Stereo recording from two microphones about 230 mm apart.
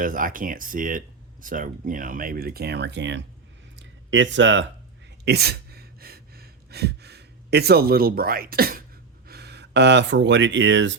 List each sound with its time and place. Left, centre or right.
0.0 s speech: right
3.8 s a sound: right
5.2 s gasp: right
9.2 s speech: right